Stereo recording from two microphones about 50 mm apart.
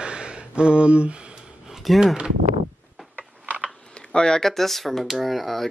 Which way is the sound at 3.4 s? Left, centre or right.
Right.